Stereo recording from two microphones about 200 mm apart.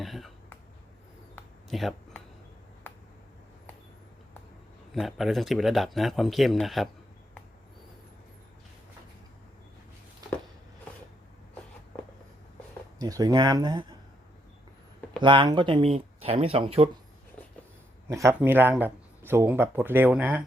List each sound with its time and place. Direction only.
0.0 s a sound: centre (ahead or behind)
1.7 s a sound: centre (ahead or behind)
4.9 s speech: centre (ahead or behind)
13.0 s speech: 20° right (ahead or behind)
15.2 s speech: 25° right (ahead or behind)
18.1 s speech: 15° right (ahead or behind)